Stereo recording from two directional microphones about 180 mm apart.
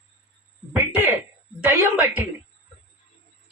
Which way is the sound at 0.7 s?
10° right (ahead or behind).